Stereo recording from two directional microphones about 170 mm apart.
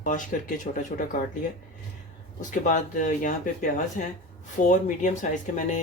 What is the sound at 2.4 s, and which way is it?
Speech, 50° left (ahead or behind).